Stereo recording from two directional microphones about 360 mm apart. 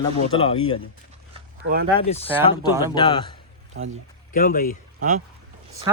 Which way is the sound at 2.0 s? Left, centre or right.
Centre.